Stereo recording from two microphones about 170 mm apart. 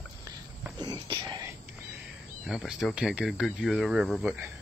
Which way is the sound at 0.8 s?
25° right (ahead or behind).